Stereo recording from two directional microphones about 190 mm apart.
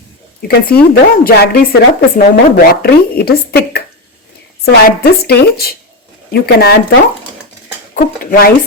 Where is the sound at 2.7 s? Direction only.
55° left (ahead or behind).